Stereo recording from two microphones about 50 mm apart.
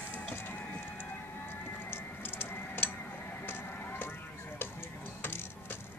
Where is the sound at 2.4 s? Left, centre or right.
Left.